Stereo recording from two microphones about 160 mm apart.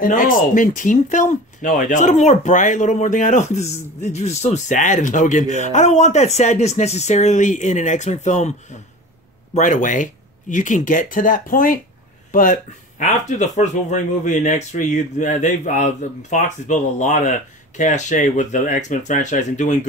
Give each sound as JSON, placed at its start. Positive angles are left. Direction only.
{"t": 0.0, "sound": "speech", "side_deg": 60}